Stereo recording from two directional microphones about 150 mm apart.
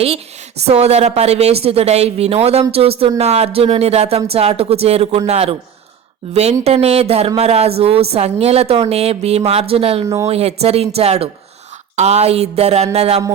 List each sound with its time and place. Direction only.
0.6 s a woman's voice: 45° right (ahead or behind)